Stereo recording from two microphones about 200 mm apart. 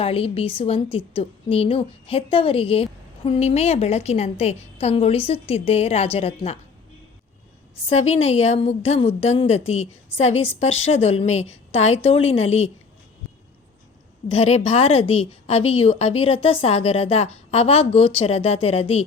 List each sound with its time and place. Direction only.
0.0 s a woman's voice: 30° left (ahead or behind)
7.9 s a woman's voice: 30° left (ahead or behind)
14.3 s a woman's voice: 30° left (ahead or behind)